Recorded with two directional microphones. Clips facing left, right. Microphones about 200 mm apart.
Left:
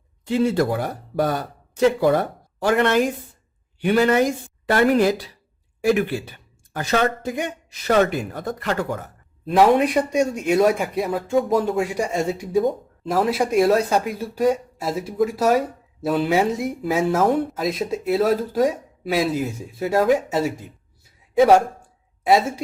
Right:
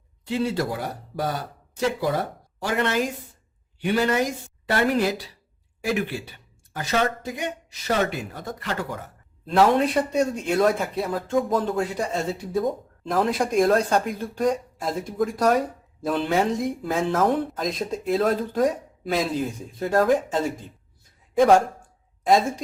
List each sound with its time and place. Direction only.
0.3 s speech: 50° left (ahead or behind)
1.1 s speech: 60° left (ahead or behind)
2.6 s speech: 60° left (ahead or behind)
4.7 s speech: 50° left (ahead or behind)
6.7 s speech: 55° left (ahead or behind)
9.5 s a woman's voice: 15° left (ahead or behind)